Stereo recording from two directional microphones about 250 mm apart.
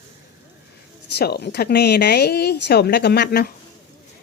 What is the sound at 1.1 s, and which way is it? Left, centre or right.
Speech, left.